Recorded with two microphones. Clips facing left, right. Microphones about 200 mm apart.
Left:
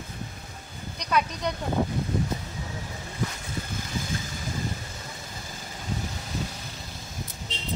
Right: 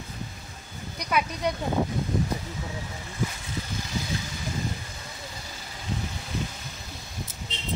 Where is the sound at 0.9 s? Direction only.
10° right (ahead or behind).